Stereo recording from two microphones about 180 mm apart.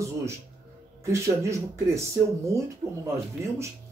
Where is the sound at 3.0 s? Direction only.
15° right (ahead or behind).